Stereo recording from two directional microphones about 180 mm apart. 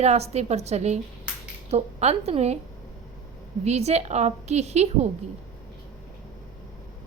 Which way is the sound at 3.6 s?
35° right (ahead or behind).